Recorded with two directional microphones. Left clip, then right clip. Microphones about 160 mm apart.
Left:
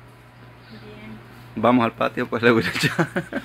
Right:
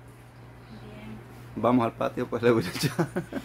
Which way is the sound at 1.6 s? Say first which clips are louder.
Left 6 dB; 5° left (ahead or behind).